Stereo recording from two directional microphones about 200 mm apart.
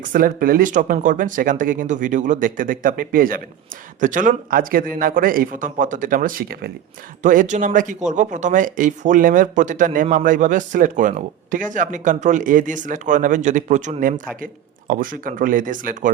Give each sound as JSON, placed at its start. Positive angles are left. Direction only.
{"t": 0.0, "sound": "speech", "side_deg": -45}